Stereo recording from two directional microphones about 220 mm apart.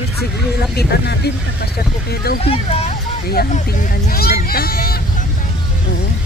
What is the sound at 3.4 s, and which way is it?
Speech, 40° left (ahead or behind).